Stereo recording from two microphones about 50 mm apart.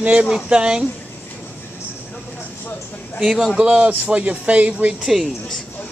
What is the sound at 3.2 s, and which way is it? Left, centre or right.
Speech, centre.